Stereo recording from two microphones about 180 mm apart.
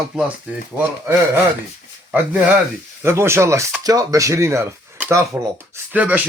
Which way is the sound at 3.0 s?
15° right (ahead or behind).